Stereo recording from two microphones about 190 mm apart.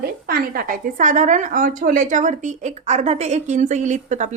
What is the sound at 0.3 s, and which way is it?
A woman's voice, 50° right (ahead or behind).